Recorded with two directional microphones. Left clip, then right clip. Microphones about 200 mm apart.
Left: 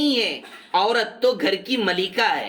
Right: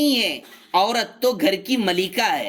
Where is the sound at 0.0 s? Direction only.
50° right (ahead or behind).